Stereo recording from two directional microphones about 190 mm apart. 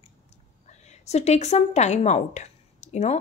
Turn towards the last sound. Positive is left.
turn(degrees=35)  # may be behind; listen again after turning